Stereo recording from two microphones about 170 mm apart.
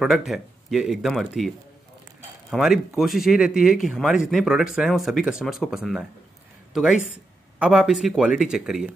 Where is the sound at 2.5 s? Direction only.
5° right (ahead or behind).